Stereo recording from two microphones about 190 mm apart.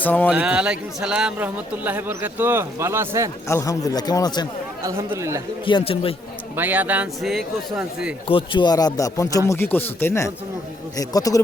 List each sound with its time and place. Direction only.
0.0 s speech: 10° left (ahead or behind)
0.3 s a man's voice: 5° right (ahead or behind)
3.5 s speech: 15° left (ahead or behind)
4.8 s a man's voice: 15° right (ahead or behind)
5.6 s speech: 25° left (ahead or behind)
6.6 s a man's voice: 10° right (ahead or behind)
8.3 s speech: 25° left (ahead or behind)